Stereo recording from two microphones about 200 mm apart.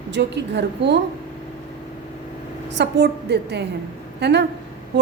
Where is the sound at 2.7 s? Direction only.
55° right (ahead or behind).